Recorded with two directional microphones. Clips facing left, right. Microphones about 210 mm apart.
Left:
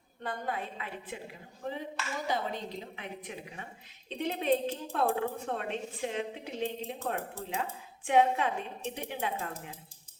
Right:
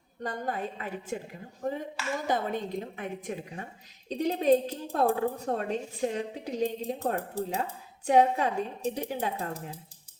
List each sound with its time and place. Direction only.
0.2 s a woman's voice: 40° right (ahead or behind)